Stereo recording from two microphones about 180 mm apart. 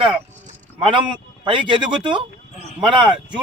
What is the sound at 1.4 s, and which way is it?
Speech, 25° right (ahead or behind).